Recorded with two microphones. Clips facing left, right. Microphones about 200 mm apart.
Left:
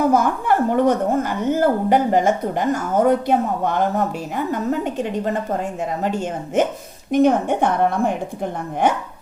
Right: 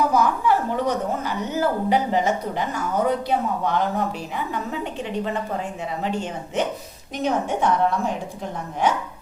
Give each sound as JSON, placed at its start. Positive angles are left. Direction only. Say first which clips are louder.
{"t": 0.0, "sound": "a woman's voice", "louder": "left 2 dB", "side_deg": 50}